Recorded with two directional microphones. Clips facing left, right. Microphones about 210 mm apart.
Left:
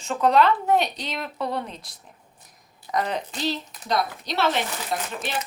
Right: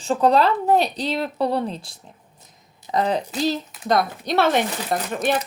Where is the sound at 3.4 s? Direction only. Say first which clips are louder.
Right 5 dB; 45° right (ahead or behind).